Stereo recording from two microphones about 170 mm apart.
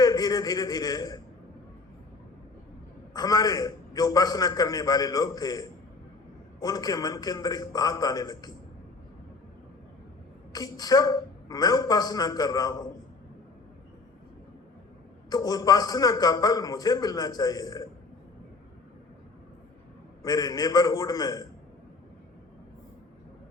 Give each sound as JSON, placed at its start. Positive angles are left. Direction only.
{"t": 0.0, "sound": "a sound", "side_deg": 20}
{"t": 3.2, "sound": "a man's voice", "side_deg": 20}
{"t": 10.5, "sound": "a man's voice", "side_deg": 20}
{"t": 15.3, "sound": "a man's voice", "side_deg": 20}
{"t": 20.2, "sound": "a man's voice", "side_deg": 20}